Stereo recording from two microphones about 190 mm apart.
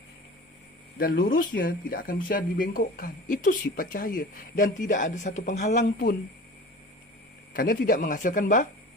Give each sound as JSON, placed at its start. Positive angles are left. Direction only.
{"t": 0.9, "sound": "speech", "side_deg": 50}
{"t": 7.5, "sound": "speech", "side_deg": 50}